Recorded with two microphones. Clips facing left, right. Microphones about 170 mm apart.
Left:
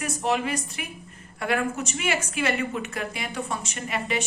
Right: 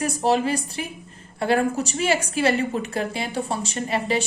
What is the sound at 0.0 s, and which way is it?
A woman's voice, 35° right (ahead or behind).